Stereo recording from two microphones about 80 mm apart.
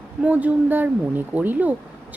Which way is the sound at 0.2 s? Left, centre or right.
Centre.